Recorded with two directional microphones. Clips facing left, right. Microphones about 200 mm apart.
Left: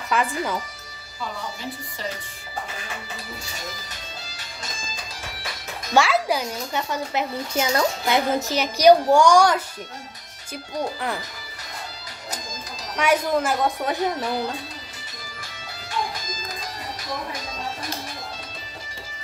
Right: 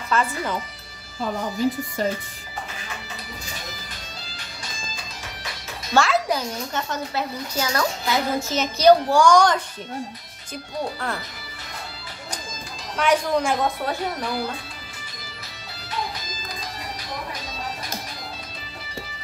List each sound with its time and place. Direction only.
0.1 s a child's voice: 15° left (ahead or behind)
1.2 s speech: 45° right (ahead or behind)
5.9 s a child's voice: 10° left (ahead or behind)
12.9 s a child's voice: 10° left (ahead or behind)
13.7 s a child's voice: 20° left (ahead or behind)